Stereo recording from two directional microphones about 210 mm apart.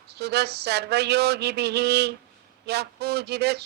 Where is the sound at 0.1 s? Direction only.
50° right (ahead or behind).